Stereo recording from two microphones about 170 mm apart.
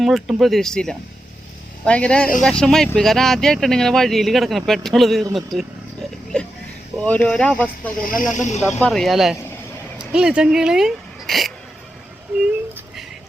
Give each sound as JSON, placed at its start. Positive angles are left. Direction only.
{"t": 0.0, "sound": "speech", "side_deg": 0}
{"t": 6.3, "sound": "a sound", "side_deg": 5}
{"t": 7.0, "sound": "speech", "side_deg": 5}
{"t": 8.0, "sound": "speech", "side_deg": 50}
{"t": 8.8, "sound": "speech", "side_deg": 0}